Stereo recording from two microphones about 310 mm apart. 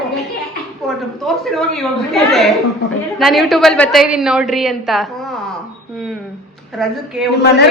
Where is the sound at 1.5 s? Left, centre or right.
Centre.